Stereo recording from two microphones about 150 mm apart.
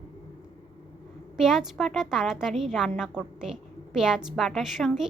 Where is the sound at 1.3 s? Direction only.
5° right (ahead or behind).